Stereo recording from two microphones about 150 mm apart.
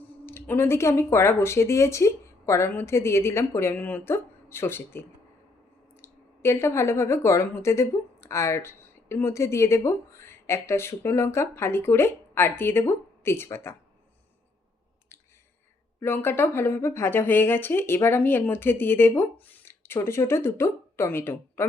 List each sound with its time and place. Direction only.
0.3 s speech: 15° left (ahead or behind)
16.0 s speech: 15° left (ahead or behind)